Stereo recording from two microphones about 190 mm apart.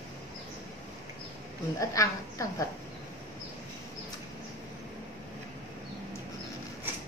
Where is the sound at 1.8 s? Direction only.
15° left (ahead or behind).